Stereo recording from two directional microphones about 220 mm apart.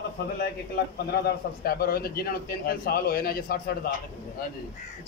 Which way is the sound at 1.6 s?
45° left (ahead or behind).